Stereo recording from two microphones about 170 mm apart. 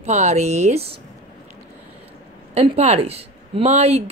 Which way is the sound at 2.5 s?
35° right (ahead or behind).